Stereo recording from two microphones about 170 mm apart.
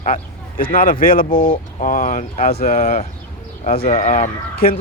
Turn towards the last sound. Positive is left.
turn(degrees=55)  # may be behind; listen again after turning